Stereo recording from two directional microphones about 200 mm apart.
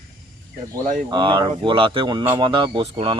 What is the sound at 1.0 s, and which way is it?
Speech, 25° right (ahead or behind).